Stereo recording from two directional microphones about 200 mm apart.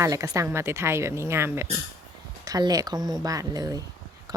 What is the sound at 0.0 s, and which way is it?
Speech, 15° right (ahead or behind).